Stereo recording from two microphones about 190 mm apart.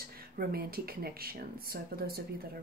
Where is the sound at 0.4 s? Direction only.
50° right (ahead or behind).